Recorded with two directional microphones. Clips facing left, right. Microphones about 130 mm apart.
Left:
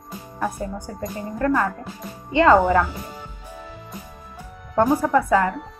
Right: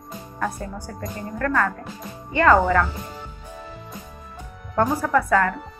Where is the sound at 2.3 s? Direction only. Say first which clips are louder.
Left 2 dB; 20° left (ahead or behind).